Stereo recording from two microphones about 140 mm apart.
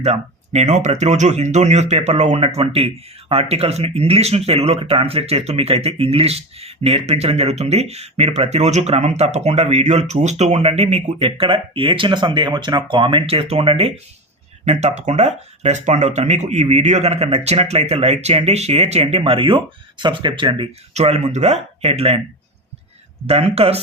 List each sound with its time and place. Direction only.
0.0 s speech: 55° right (ahead or behind); by 20.7 s 35° right (ahead or behind)
20.9 s speech: 50° right (ahead or behind)
23.3 s speech: 45° right (ahead or behind)